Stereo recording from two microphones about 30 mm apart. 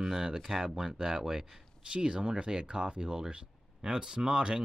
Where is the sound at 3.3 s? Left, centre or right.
Right.